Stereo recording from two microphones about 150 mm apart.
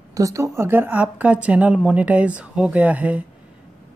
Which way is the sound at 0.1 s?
20° right (ahead or behind).